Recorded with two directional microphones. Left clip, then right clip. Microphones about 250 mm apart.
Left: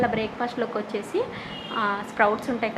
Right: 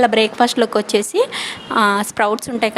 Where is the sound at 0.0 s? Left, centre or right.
Right.